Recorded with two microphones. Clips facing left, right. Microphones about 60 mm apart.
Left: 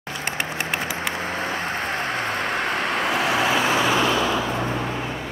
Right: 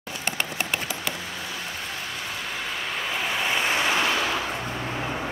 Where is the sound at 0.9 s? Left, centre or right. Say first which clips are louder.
Left 6 dB; left.